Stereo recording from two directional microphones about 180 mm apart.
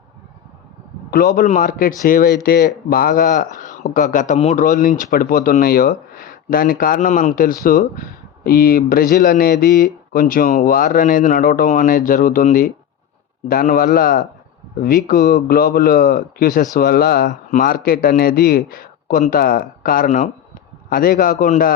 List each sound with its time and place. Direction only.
1.1 s speech: 55° left (ahead or behind)